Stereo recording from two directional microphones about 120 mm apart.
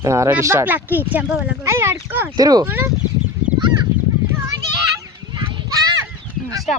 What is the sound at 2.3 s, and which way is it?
Speech, 30° right (ahead or behind).